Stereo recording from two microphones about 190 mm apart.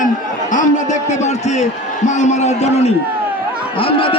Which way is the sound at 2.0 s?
40° left (ahead or behind).